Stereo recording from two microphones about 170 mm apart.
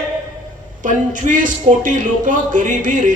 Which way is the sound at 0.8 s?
50° right (ahead or behind).